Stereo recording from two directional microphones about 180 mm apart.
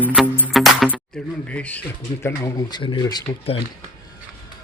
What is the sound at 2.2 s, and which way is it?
Speech, 15° left (ahead or behind).